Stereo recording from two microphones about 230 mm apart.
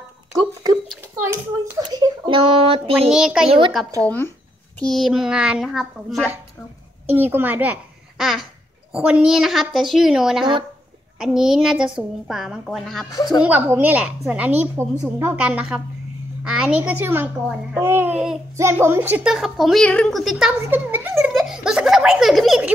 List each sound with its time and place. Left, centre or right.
1.9 s speech: centre
3.1 s a child's voice: centre
3.4 s a woman's voice: right
4.7 s a child's voice: centre
13.1 s speech: centre
13.4 s a woman's voice: centre